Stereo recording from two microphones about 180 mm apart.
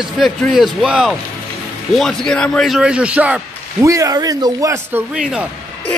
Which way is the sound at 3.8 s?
20° right (ahead or behind).